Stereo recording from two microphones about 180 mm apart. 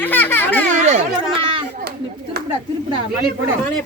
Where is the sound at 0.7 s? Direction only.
40° right (ahead or behind).